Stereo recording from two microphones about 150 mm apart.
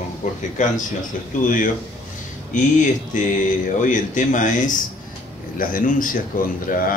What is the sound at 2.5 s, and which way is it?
Speech, 55° left (ahead or behind).